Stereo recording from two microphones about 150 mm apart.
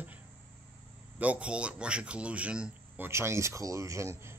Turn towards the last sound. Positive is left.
turn(degrees=-20)  # may be behind; listen again after turning